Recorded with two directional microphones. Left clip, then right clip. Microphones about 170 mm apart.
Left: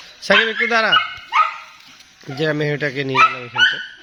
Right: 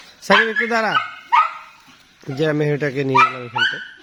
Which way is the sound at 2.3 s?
50° right (ahead or behind).